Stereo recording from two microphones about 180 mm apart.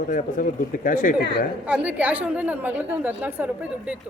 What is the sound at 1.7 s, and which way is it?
A woman's voice, 10° right (ahead or behind).